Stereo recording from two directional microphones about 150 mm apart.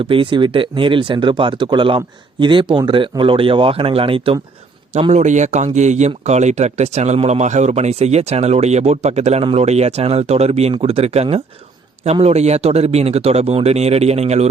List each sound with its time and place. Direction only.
0.0 s speech: 35° right (ahead or behind)